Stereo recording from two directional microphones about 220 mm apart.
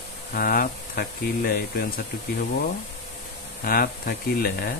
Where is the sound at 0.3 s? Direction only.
40° left (ahead or behind).